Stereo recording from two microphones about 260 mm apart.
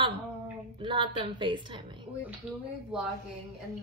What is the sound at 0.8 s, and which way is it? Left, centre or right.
A woman's voice, centre.